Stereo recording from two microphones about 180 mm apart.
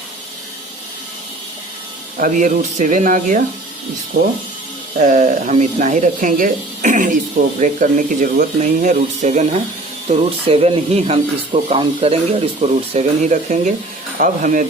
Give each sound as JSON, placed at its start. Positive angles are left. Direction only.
{"t": 2.1, "sound": "speech", "side_deg": -45}
{"t": 4.9, "sound": "speech", "side_deg": -45}